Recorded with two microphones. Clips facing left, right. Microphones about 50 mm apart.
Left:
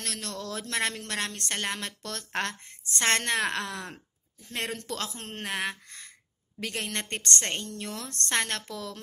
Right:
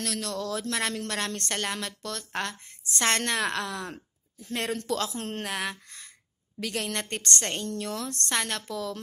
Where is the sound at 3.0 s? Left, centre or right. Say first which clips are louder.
Even; left.